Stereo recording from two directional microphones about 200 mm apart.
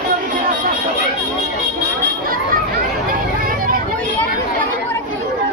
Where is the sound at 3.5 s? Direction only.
45° right (ahead or behind).